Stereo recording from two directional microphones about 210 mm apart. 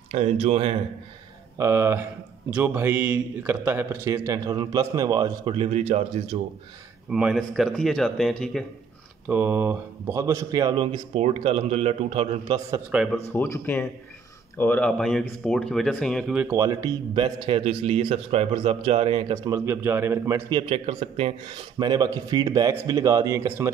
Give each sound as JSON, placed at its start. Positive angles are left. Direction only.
{"t": 0.1, "sound": "a man's voice", "side_deg": -30}
{"t": 1.6, "sound": "speech", "side_deg": -10}
{"t": 7.1, "sound": "speech", "side_deg": -5}
{"t": 9.3, "sound": "a man's voice", "side_deg": -10}
{"t": 12.9, "sound": "speech", "side_deg": 0}
{"t": 13.3, "sound": "speech", "side_deg": 10}
{"t": 16.3, "sound": "a man's voice", "side_deg": -10}